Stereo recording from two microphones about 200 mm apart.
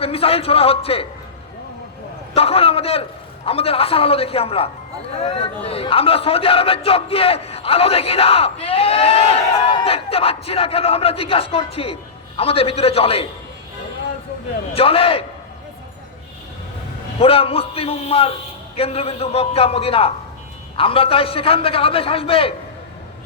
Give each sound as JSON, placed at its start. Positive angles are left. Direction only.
{"t": 0.0, "sound": "a man's voice", "side_deg": 30}
{"t": 2.3, "sound": "a man's voice", "side_deg": 30}
{"t": 14.7, "sound": "a man's voice", "side_deg": 30}
{"t": 17.2, "sound": "a man's voice", "side_deg": 30}